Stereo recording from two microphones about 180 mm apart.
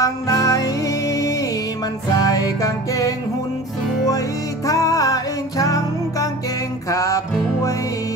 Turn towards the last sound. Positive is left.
turn(degrees=15)  # may be behind; listen again after turning